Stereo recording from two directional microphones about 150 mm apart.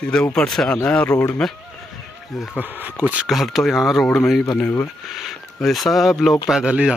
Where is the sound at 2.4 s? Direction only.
10° right (ahead or behind).